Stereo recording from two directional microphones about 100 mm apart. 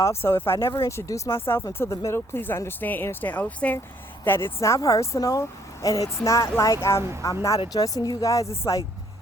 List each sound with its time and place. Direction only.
0.0 s speech: 25° left (ahead or behind)
2.0 s speech: 25° left (ahead or behind)
7.7 s speech: 40° left (ahead or behind)